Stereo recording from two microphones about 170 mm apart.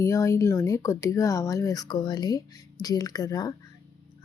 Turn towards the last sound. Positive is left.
turn(degrees=20)  # may be behind; listen again after turning